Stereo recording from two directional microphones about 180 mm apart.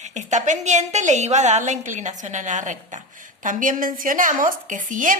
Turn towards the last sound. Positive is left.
turn(degrees=-45)  # may be behind; listen again after turning